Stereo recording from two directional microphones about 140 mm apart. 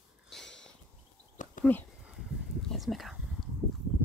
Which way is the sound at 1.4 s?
65° left (ahead or behind).